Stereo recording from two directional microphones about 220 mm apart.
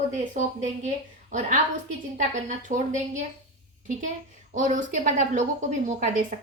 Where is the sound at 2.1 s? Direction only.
35° right (ahead or behind).